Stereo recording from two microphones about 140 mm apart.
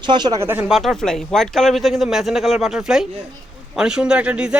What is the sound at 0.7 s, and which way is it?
Speech, centre (ahead or behind).